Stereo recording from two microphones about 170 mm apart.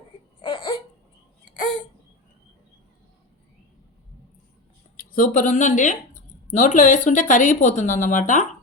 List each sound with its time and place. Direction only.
0.4 s laughter: 30° left (ahead or behind)
4.9 s speech: 55° left (ahead or behind)